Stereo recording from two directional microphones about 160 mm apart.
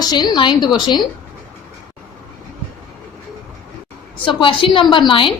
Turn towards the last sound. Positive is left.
turn(degrees=30)  # may be behind; listen again after turning